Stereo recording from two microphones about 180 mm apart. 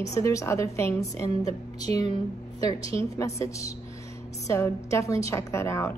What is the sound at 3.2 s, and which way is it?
A woman's voice, 15° left (ahead or behind).